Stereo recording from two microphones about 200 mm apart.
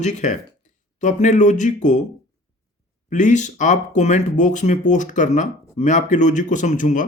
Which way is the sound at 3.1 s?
40° left (ahead or behind).